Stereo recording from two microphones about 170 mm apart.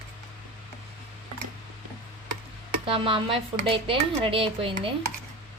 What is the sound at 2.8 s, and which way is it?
Speech, 30° right (ahead or behind).